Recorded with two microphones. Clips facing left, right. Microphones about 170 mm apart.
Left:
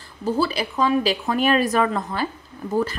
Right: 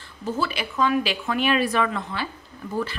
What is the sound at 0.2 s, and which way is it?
A woman's voice, 35° left (ahead or behind).